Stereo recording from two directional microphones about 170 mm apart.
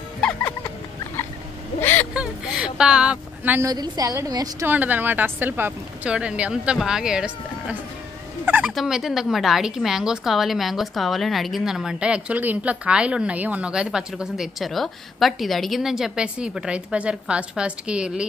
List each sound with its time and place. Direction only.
0.2 s music: 5° left (ahead or behind)
1.8 s vehicle: 10° left (ahead or behind)
2.1 s a sound: 5° right (ahead or behind)
3.7 s a woman's voice: 25° right (ahead or behind)
4.6 s speech: 10° right (ahead or behind)
8.5 s fowl: 10° right (ahead or behind)
8.7 s a woman's voice: 5° right (ahead or behind)